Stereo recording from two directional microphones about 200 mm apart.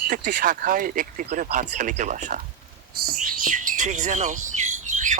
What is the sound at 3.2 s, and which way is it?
Bird, 40° right (ahead or behind).